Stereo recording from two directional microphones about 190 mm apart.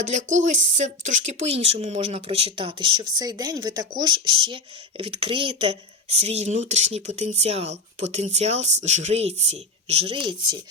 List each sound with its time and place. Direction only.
0.4 s speech: 40° right (ahead or behind)